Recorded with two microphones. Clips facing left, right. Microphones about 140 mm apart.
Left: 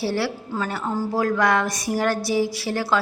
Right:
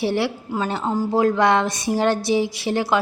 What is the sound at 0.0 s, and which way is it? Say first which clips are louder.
A woman's voice: right 3 dB; 20° right (ahead or behind).